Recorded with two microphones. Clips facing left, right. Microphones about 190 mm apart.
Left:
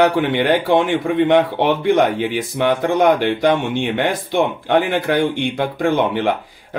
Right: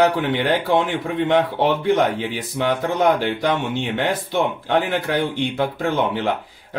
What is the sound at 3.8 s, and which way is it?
Speech, 15° left (ahead or behind).